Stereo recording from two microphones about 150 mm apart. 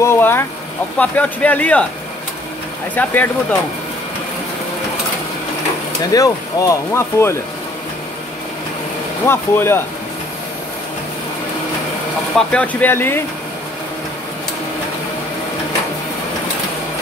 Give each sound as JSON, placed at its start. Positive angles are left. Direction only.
{"t": 0.0, "sound": "speech", "side_deg": 15}
{"t": 3.0, "sound": "speech", "side_deg": 10}
{"t": 6.1, "sound": "speech", "side_deg": 20}
{"t": 9.2, "sound": "speech", "side_deg": 15}
{"t": 12.4, "sound": "speech", "side_deg": 10}